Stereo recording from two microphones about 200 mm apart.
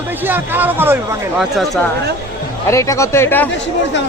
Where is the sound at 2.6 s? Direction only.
15° left (ahead or behind).